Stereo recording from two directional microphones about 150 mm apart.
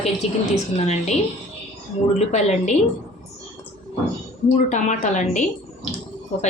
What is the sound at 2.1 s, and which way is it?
Speech, 50° left (ahead or behind).